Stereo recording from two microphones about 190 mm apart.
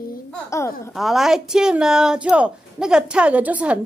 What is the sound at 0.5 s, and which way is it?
Speech, 15° left (ahead or behind).